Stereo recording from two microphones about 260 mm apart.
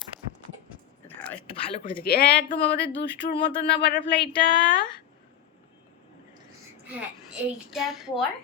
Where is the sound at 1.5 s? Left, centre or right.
Left.